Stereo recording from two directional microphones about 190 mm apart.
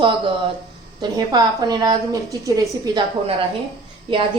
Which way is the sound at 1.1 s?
20° right (ahead or behind).